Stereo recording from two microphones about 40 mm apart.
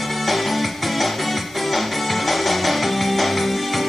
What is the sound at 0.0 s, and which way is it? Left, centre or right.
Music, centre.